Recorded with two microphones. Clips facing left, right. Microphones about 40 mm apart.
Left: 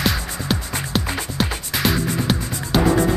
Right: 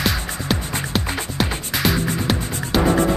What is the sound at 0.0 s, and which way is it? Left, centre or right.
Music, centre.